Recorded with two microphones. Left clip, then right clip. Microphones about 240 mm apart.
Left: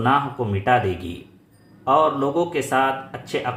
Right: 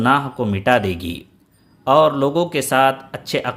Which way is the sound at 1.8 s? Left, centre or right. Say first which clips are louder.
Right 4 dB; right.